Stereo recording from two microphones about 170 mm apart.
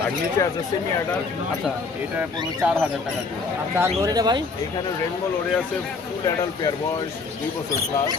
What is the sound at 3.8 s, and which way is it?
Speech, 20° right (ahead or behind).